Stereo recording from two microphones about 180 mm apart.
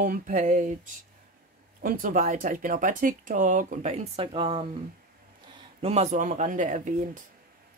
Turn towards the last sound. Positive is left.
turn(degrees=-45)  # may be behind; listen again after turning